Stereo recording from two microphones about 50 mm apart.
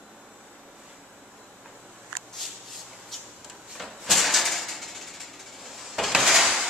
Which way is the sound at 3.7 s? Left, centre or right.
Centre.